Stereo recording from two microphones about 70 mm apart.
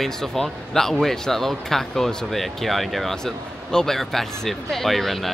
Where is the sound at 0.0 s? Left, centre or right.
Centre.